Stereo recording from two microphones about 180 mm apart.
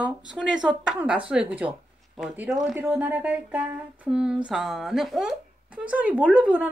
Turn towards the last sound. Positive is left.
turn(degrees=-5)  # may be behind; listen again after turning